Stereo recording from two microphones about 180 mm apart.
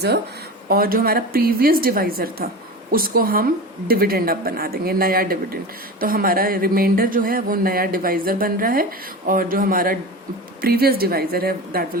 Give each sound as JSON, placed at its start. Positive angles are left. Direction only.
{"t": 0.7, "sound": "a woman's voice", "side_deg": -55}